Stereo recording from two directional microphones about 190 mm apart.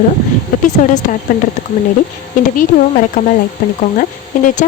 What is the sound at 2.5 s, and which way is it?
Speech, 45° left (ahead or behind).